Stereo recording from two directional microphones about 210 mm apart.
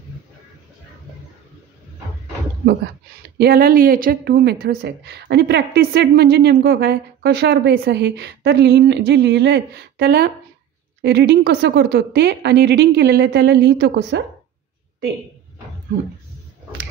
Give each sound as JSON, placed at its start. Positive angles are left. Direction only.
{"t": 3.3, "sound": "a woman's voice", "side_deg": -50}